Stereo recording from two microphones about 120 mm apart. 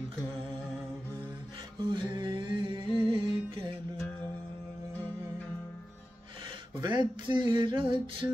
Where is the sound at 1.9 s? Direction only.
40° right (ahead or behind).